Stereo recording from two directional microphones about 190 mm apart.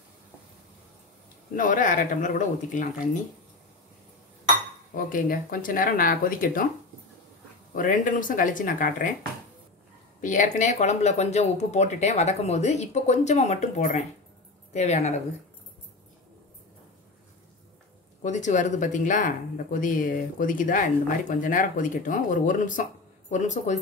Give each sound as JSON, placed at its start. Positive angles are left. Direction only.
{"t": 1.6, "sound": "speech", "side_deg": 45}
{"t": 4.9, "sound": "speech", "side_deg": 45}
{"t": 7.7, "sound": "speech", "side_deg": 45}
{"t": 10.2, "sound": "speech", "side_deg": 40}
{"t": 18.2, "sound": "speech", "side_deg": 40}